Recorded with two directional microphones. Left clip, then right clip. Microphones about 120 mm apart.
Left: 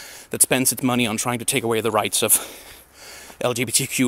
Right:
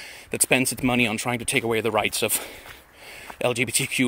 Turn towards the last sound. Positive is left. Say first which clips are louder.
# left 1 dB
turn(degrees=30)  # may be behind; listen again after turning